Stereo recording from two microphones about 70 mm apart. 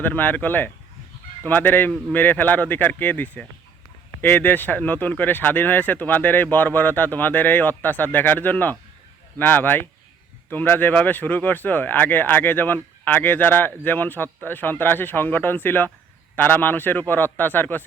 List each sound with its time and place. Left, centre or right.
0.0 s speech: left